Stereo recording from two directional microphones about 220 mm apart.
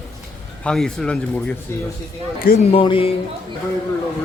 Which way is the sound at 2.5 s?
25° left (ahead or behind).